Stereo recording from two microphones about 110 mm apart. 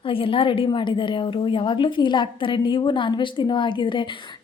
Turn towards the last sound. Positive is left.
turn(degrees=45)  # may be behind; listen again after turning